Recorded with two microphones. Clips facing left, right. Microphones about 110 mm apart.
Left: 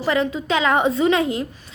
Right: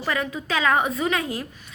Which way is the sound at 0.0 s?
25° left (ahead or behind).